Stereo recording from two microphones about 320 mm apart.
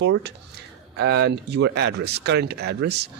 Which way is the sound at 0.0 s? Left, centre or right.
Right.